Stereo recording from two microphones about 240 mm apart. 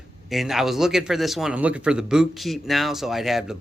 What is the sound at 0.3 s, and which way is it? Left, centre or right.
A man's voice, centre.